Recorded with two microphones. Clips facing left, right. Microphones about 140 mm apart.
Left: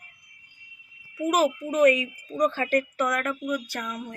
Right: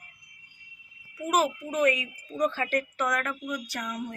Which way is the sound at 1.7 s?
40° left (ahead or behind).